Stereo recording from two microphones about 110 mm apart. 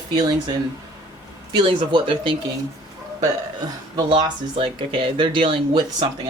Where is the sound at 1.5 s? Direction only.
50° right (ahead or behind).